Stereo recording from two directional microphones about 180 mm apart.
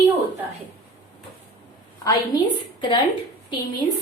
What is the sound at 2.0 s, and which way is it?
A woman's voice, 20° left (ahead or behind).